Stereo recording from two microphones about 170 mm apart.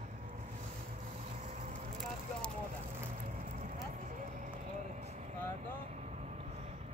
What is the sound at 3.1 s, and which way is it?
Vehicle, 45° right (ahead or behind).